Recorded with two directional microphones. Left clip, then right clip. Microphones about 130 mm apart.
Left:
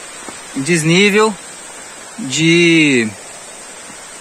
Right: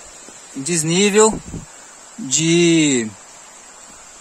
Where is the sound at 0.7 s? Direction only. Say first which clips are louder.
Left 6 dB; 40° right (ahead or behind).